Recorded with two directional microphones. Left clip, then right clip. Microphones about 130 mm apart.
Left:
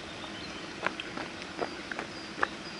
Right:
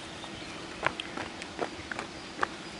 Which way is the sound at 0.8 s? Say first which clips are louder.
Right 2 dB; 25° right (ahead or behind).